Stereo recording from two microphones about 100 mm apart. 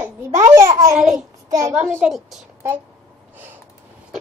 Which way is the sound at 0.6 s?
30° right (ahead or behind).